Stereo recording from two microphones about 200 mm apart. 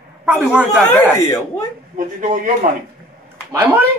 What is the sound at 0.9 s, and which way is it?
Speech, 10° left (ahead or behind).